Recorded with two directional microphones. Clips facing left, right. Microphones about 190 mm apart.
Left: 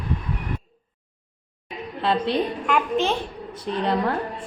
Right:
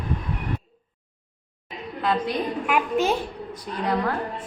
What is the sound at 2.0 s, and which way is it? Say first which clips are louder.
Speech: left 2 dB; 30° left (ahead or behind).